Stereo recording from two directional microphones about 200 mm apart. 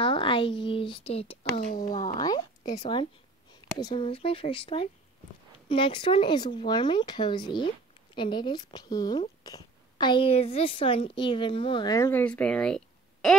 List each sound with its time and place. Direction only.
0.0 s speech: 25° left (ahead or behind)
2.1 s a woman's voice: 20° left (ahead or behind); by 13.4 s centre (ahead or behind)